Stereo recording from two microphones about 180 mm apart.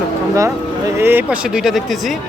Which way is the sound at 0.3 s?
15° right (ahead or behind).